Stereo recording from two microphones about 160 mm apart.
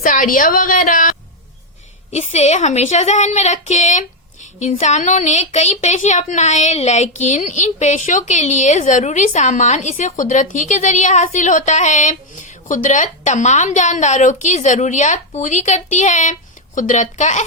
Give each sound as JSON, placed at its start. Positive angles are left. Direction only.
{"t": 0.0, "sound": "a woman's voice", "side_deg": 55}
{"t": 2.1, "sound": "a woman's voice", "side_deg": 45}